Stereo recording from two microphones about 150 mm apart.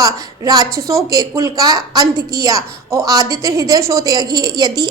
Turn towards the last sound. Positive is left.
turn(degrees=-30)  # may be behind; listen again after turning